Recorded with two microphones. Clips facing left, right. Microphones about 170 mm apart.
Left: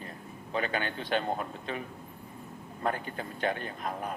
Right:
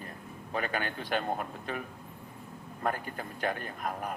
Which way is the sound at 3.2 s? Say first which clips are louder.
Left 2 dB; 25° left (ahead or behind).